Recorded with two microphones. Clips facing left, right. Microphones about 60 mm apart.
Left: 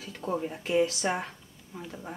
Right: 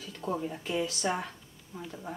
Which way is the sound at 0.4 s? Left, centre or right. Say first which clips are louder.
Left 10 dB; left.